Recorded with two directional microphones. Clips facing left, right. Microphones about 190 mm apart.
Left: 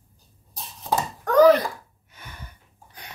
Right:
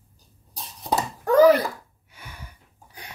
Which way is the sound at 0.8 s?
10° right (ahead or behind).